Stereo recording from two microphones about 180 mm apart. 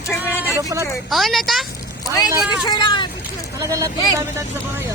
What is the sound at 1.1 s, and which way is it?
Speech, centre (ahead or behind).